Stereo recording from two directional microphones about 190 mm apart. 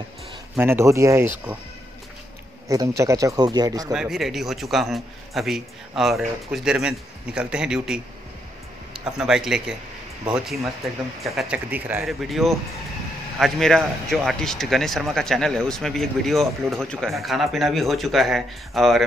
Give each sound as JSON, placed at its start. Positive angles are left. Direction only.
{"t": 0.6, "sound": "speech", "side_deg": -10}
{"t": 3.0, "sound": "speech", "side_deg": -15}
{"t": 3.9, "sound": "a man's voice", "side_deg": -5}